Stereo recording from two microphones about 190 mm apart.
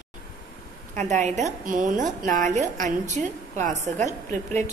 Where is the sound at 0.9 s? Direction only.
40° right (ahead or behind).